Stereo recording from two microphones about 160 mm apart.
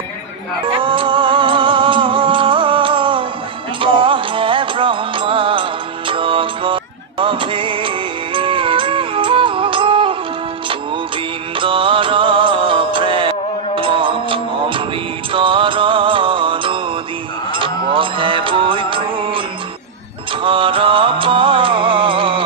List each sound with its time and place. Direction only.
0.7 s music: 30° right (ahead or behind)
11.5 s music: 35° right (ahead or behind)
20.4 s music: 35° right (ahead or behind)